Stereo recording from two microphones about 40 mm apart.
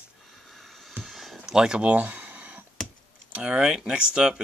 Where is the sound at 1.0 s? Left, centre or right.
Centre.